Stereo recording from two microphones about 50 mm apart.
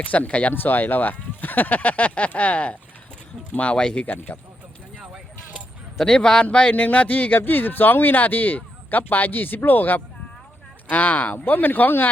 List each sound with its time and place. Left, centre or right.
0.0 s a man's voice: left
0.5 s a man's voice: left; by 4.0 s centre
4.0 s speech: left
6.0 s a man's voice: centre; by 7.3 s left
7.3 s speech: left